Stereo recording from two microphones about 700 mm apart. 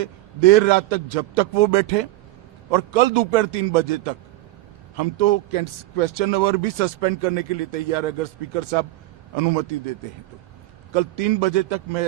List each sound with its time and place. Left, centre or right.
0.0 s speech: right
10.9 s a man's voice: right